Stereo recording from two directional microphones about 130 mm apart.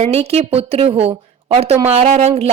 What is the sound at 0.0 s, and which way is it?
A woman's voice, 50° right (ahead or behind).